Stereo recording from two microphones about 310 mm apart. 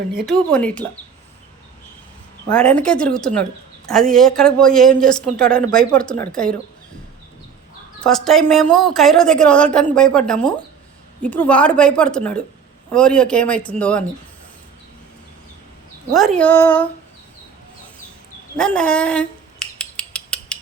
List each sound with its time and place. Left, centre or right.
0.3 s a woman's voice: centre
2.5 s a woman's voice: centre
8.0 s a woman's voice: centre
16.1 s a woman's voice: centre
18.5 s dog: centre